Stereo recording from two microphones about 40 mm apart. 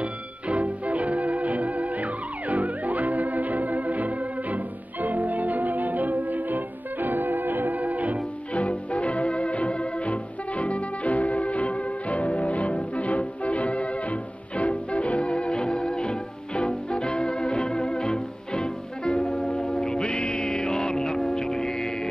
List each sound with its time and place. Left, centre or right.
0.0 s music: right
8.5 s music: left; by 21.9 s centre